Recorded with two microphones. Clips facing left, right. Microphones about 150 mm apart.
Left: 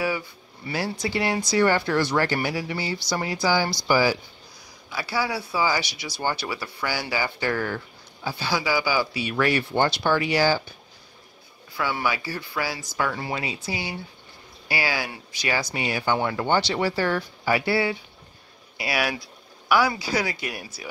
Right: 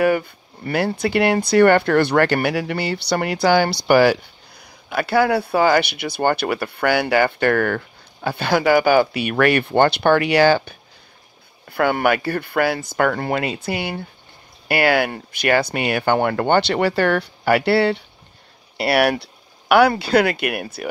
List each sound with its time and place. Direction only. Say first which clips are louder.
0.0 s speech: right 9 dB; 55° right (ahead or behind)
11.7 s speech: right 9 dB; 60° right (ahead or behind)